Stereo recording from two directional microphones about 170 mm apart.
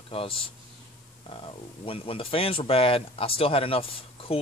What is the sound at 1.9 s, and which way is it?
Speech, 35° left (ahead or behind).